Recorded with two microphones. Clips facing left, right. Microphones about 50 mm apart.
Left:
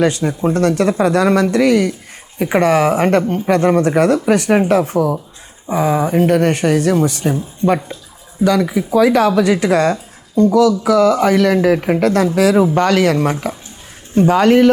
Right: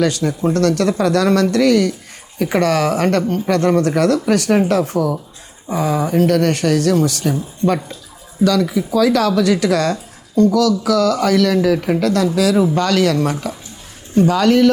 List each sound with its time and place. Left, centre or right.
0.0 s speech: left